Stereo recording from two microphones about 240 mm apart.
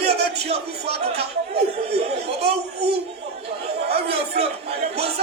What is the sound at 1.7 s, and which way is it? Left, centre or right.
Speech, right.